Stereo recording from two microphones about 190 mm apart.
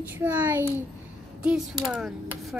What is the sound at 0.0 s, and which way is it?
A child's voice, 10° right (ahead or behind).